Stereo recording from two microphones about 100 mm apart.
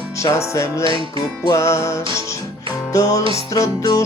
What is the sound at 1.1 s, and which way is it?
Music, 45° left (ahead or behind).